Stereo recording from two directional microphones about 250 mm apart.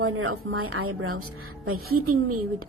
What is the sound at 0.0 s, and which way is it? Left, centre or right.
A woman's voice, right.